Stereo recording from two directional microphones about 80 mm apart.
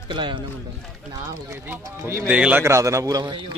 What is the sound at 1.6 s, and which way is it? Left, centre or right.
Speech, right.